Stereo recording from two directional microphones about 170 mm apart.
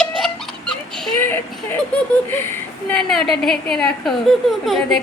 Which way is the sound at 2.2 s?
10° left (ahead or behind).